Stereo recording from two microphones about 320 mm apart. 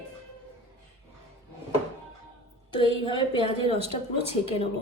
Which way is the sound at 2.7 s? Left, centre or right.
Centre.